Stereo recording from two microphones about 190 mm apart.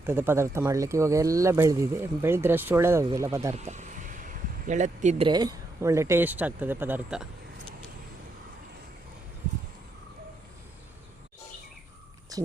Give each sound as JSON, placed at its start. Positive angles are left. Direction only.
{"t": 0.0, "sound": "speech", "side_deg": -10}
{"t": 3.5, "sound": "a sound", "side_deg": -35}
{"t": 5.3, "sound": "speech", "side_deg": -20}